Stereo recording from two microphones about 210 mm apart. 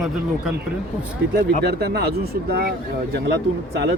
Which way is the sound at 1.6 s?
50° right (ahead or behind).